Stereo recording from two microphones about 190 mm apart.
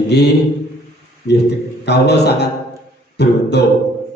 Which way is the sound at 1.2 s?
60° left (ahead or behind).